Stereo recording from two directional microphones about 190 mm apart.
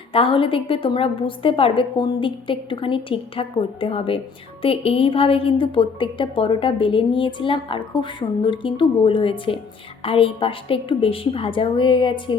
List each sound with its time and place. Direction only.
0.1 s a woman's voice: 30° left (ahead or behind)